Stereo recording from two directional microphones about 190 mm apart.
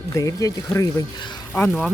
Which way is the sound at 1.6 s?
5° left (ahead or behind).